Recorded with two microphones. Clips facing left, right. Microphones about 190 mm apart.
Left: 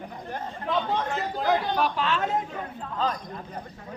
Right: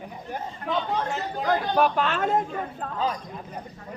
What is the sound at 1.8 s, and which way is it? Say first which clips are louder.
Speech: right 3 dB; 50° right (ahead or behind).